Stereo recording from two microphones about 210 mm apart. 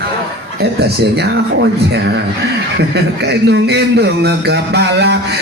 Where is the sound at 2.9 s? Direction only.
55° right (ahead or behind).